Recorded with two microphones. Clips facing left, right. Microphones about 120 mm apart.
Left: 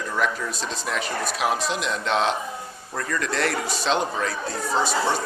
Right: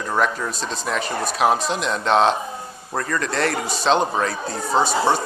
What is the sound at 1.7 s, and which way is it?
Speech, 35° right (ahead or behind).